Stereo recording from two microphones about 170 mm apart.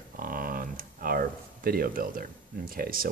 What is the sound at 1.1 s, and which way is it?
Speech, 60° right (ahead or behind).